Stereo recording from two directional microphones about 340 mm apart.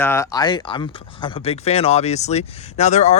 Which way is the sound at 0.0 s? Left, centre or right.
Centre.